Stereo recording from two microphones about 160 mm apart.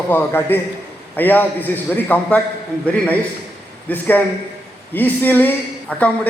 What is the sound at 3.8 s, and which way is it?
A man's voice, 10° left (ahead or behind).